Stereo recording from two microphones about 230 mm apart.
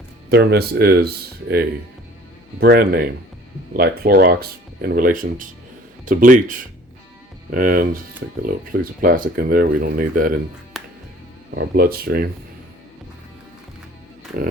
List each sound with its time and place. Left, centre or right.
0.3 s speech: right
10.8 s music: centre
11.5 s speech: right
14.3 s speech: right